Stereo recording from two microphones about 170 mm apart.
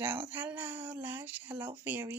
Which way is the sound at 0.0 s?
15° right (ahead or behind).